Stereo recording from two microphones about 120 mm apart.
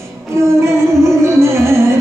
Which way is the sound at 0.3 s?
25° right (ahead or behind).